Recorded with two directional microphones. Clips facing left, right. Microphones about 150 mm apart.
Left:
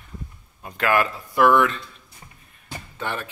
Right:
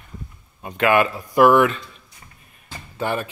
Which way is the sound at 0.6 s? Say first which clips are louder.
Right 4 dB; 5° right (ahead or behind).